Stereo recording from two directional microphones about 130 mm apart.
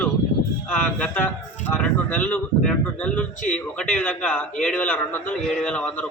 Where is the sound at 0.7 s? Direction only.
10° left (ahead or behind).